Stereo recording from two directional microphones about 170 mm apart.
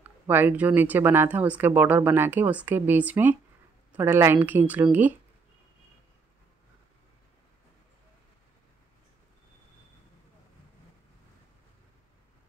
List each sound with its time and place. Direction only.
0.3 s speech: 10° right (ahead or behind)